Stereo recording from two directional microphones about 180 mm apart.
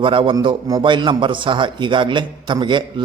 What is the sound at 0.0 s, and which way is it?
A man's voice, 30° right (ahead or behind).